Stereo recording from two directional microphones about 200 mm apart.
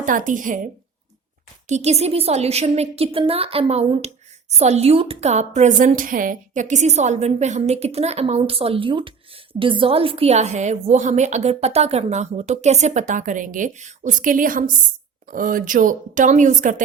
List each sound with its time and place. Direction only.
0.0 s a woman's voice: 40° right (ahead or behind)
1.6 s a woman's voice: 35° right (ahead or behind)